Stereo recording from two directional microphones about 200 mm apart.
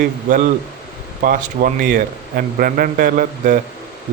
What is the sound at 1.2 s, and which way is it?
Speech, 45° right (ahead or behind).